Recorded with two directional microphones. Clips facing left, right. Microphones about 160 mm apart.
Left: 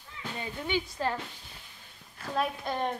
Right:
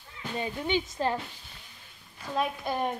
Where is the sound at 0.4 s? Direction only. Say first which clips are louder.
Right 3 dB; 20° right (ahead or behind).